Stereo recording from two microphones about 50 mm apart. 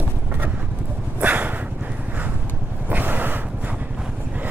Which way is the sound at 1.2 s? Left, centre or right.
Right.